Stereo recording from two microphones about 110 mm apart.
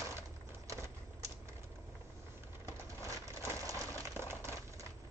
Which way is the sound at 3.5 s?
25° right (ahead or behind).